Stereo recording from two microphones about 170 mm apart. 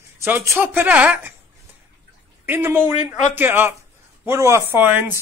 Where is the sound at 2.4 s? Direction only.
10° right (ahead or behind).